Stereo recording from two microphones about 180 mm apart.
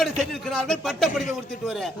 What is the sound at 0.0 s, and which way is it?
Speech, centre (ahead or behind).